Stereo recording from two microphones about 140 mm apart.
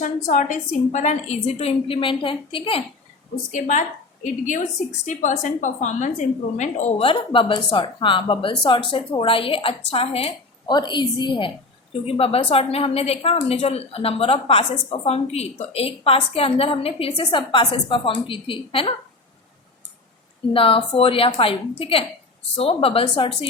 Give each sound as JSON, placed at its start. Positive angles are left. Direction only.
{"t": 0.0, "sound": "a woman's voice", "side_deg": 65}
{"t": 3.5, "sound": "a woman's voice", "side_deg": 65}
{"t": 7.0, "sound": "a woman's voice", "side_deg": 40}
{"t": 10.7, "sound": "a woman's voice", "side_deg": 30}
{"t": 20.5, "sound": "a woman's voice", "side_deg": 40}